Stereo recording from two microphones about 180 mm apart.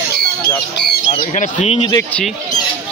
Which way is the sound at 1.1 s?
45° left (ahead or behind).